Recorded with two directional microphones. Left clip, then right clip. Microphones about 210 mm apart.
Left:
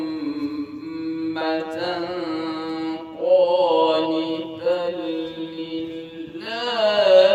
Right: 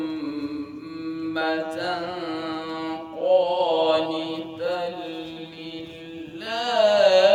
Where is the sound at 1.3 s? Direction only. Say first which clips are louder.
Right 1 dB; 20° right (ahead or behind); by 5.2 s 35° right (ahead or behind).